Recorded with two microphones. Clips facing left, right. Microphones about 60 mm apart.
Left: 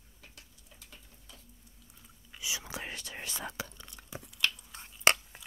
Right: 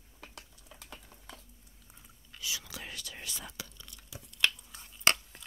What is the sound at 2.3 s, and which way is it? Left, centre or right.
Whispering, centre.